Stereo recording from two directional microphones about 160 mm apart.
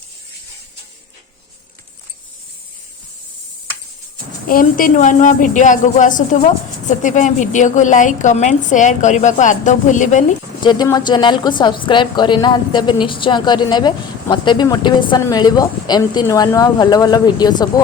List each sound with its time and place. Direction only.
4.4 s a woman's voice: 60° left (ahead or behind)
10.6 s a woman's voice: 30° left (ahead or behind)